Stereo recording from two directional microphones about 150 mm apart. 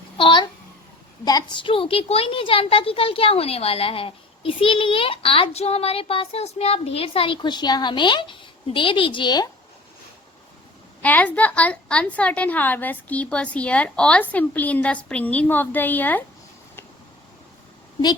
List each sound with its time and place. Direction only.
0.2 s a sound: 35° left (ahead or behind)
1.2 s a woman's voice: 25° left (ahead or behind)
11.0 s a woman's voice: 10° left (ahead or behind)